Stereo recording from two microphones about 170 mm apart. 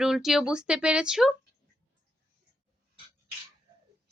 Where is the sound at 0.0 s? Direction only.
5° right (ahead or behind).